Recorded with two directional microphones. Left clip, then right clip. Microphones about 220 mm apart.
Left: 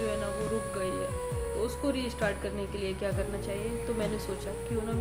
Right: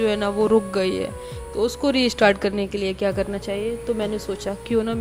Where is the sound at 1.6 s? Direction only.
35° right (ahead or behind).